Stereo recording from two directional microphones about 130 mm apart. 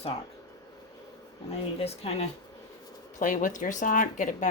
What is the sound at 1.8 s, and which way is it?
Speech, 50° left (ahead or behind).